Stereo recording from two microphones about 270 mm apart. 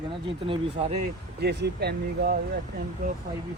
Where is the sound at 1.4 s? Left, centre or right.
Right.